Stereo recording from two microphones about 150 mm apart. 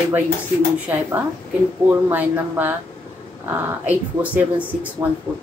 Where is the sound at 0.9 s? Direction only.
10° right (ahead or behind).